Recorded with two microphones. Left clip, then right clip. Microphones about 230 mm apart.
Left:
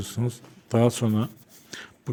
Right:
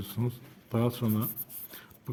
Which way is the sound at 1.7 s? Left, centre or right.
Left.